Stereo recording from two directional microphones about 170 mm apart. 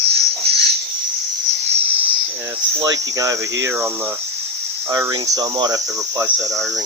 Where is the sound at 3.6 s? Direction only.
15° right (ahead or behind).